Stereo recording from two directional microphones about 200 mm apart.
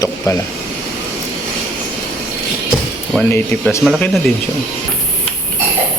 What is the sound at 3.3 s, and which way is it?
Speech, 10° left (ahead or behind).